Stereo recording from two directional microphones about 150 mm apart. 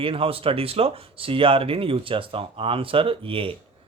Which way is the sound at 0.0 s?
35° right (ahead or behind).